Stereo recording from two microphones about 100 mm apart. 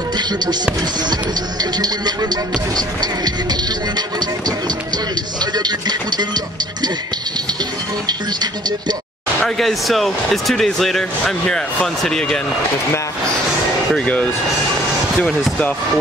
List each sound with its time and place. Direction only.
0.2 s music: 45° right (ahead or behind)
1.1 s speech: 40° right (ahead or behind)
8.1 s speech: 45° right (ahead or behind)
9.6 s speech: centre (ahead or behind)
13.9 s speech: 10° left (ahead or behind)